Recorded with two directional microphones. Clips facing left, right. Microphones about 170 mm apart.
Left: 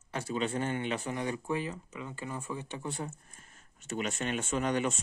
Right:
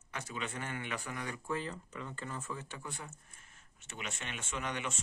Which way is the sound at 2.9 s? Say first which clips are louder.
Left 9 dB; 35° left (ahead or behind).